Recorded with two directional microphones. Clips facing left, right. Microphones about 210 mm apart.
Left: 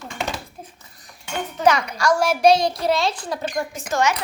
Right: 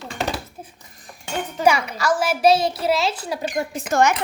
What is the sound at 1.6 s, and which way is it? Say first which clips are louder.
A child's voice: left 1 dB; 5° right (ahead or behind).